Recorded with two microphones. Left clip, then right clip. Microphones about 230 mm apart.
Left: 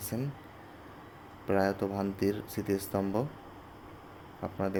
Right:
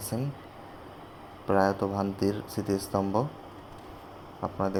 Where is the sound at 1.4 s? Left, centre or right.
Centre.